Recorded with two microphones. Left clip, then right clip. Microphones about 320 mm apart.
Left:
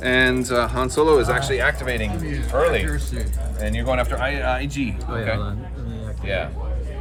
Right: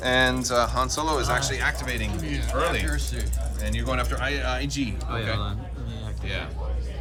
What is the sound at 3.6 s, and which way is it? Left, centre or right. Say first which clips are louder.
Speech: left 6 dB; centre.